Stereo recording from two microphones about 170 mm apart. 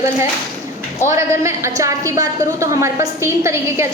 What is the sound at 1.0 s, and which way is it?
A woman's voice, 15° right (ahead or behind).